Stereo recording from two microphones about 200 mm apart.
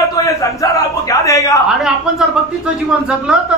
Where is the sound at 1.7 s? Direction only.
Centre (ahead or behind).